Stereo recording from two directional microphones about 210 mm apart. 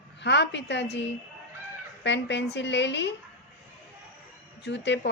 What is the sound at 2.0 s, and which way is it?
A woman's voice, 55° left (ahead or behind).